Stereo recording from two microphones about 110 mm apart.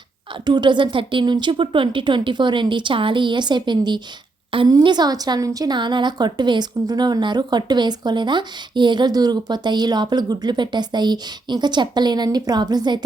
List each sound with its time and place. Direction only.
0.4 s a woman's voice: 40° right (ahead or behind)